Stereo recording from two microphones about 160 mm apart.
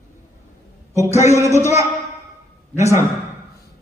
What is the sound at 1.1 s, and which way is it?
Speech, 20° right (ahead or behind).